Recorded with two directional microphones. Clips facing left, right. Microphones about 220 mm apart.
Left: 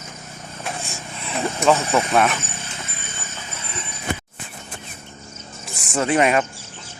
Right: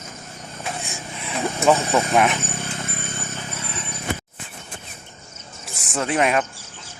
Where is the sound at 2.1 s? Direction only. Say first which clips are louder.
Even; 15° right (ahead or behind).